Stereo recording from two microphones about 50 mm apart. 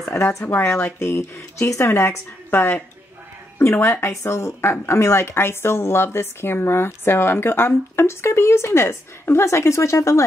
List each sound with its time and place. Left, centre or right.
0.0 s speech: left
0.5 s speech: left
2.5 s speech: left
3.5 s speech: left
4.1 s speech: left
4.6 s speech: left